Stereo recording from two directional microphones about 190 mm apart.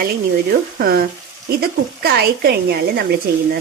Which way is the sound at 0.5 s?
50° right (ahead or behind).